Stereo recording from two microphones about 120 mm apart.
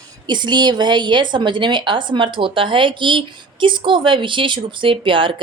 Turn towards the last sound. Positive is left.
turn(degrees=-45)  # may be behind; listen again after turning